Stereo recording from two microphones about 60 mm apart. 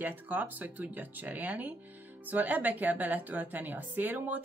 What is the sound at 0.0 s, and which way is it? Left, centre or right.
A woman's voice, right.